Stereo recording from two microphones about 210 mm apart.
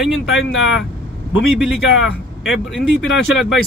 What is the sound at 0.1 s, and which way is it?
Speech, 65° left (ahead or behind).